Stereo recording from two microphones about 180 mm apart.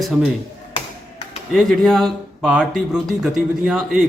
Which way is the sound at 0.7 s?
30° left (ahead or behind).